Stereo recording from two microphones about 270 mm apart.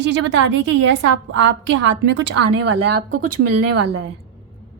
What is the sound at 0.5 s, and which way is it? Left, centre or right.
A woman's voice, right.